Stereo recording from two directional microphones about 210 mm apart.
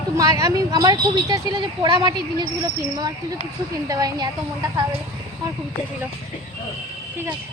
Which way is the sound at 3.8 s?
15° right (ahead or behind).